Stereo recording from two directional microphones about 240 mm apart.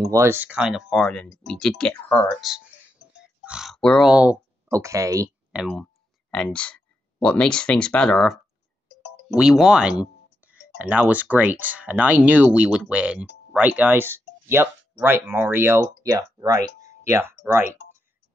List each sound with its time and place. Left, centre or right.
0.1 s speech: centre
5.6 s speech: centre
8.8 s music: left
9.3 s a sound: centre
10.8 s speech: centre